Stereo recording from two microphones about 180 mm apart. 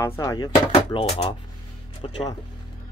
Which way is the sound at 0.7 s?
35° left (ahead or behind).